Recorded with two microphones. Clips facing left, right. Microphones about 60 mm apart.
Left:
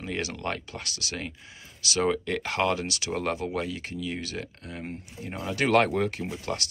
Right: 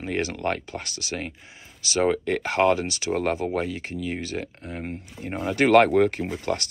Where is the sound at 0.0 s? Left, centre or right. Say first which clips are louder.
Right 5 dB; right.